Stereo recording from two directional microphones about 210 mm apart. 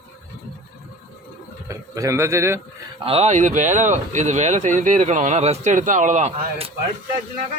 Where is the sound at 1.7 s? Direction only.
15° right (ahead or behind).